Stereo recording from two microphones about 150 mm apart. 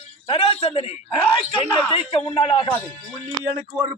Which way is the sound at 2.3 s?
35° left (ahead or behind).